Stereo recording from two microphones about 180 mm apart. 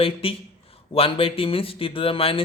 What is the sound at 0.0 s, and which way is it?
Speech, 30° left (ahead or behind).